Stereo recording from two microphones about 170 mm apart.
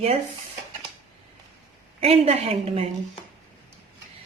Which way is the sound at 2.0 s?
35° right (ahead or behind).